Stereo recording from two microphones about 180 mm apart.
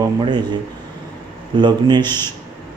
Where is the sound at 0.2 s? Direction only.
25° right (ahead or behind).